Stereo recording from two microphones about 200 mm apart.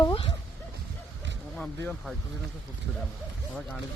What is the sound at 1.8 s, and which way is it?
Speech, 5° left (ahead or behind).